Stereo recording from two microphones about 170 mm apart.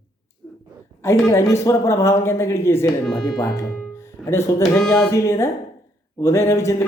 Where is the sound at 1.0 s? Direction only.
15° left (ahead or behind).